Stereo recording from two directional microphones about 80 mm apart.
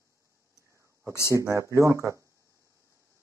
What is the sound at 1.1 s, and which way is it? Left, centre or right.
Speech, left.